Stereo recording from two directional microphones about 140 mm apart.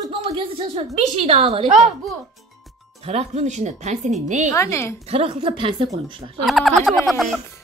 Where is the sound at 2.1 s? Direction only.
Centre (ahead or behind).